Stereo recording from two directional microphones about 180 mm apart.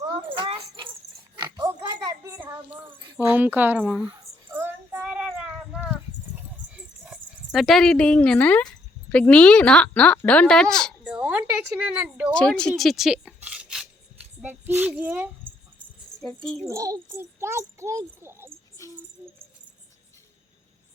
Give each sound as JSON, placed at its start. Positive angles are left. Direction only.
{"t": 0.0, "sound": "keys jangling", "side_deg": -25}
{"t": 1.4, "sound": "oink", "side_deg": -25}
{"t": 3.2, "sound": "child singing", "side_deg": -10}
{"t": 9.0, "sound": "a woman's voice", "side_deg": 5}
{"t": 11.0, "sound": "a sound", "side_deg": -5}
{"t": 12.3, "sound": "a child's voice", "side_deg": 5}
{"t": 16.2, "sound": "a woman's voice", "side_deg": 5}
{"t": 16.6, "sound": "a child's voice", "side_deg": -20}
{"t": 18.8, "sound": "music", "side_deg": 20}